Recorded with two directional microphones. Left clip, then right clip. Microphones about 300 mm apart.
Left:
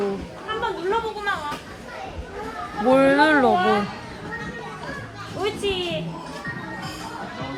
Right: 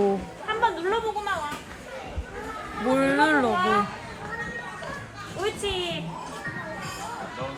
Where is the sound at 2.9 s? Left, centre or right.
Centre.